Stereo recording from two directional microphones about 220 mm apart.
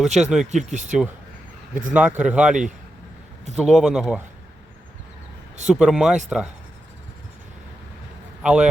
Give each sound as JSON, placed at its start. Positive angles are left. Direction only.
{"t": 0.0, "sound": "speech", "side_deg": 0}
{"t": 0.5, "sound": "speech", "side_deg": -35}
{"t": 1.9, "sound": "speech", "side_deg": -5}
{"t": 5.6, "sound": "speech", "side_deg": -5}
{"t": 8.4, "sound": "a man's voice", "side_deg": -5}